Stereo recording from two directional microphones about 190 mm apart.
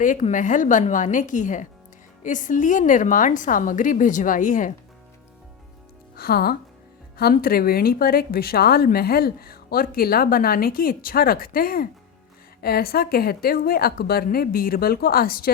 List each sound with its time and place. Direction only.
0.0 s speech: 40° left (ahead or behind)
6.1 s speech: 50° left (ahead or behind)